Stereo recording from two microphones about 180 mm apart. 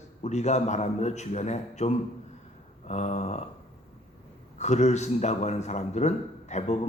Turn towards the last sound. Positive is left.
turn(degrees=40)  # may be behind; listen again after turning